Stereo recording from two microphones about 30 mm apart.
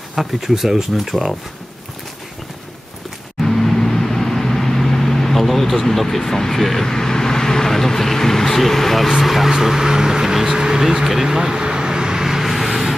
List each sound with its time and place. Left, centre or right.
0.1 s speech: centre
3.4 s vehicle: centre
6.9 s speech: centre
9.5 s speech: centre
11.1 s vehicle: centre